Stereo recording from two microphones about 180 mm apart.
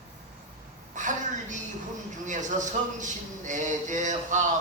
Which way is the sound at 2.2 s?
45° right (ahead or behind).